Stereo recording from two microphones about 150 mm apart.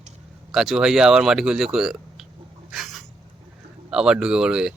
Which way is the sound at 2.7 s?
Centre (ahead or behind).